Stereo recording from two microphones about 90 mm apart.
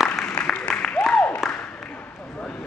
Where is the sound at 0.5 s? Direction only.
10° left (ahead or behind).